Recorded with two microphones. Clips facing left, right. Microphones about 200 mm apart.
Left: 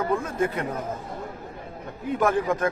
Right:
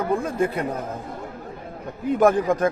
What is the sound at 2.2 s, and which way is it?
Speech, 35° right (ahead or behind).